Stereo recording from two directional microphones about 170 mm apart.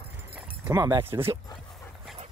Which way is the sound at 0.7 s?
20° right (ahead or behind).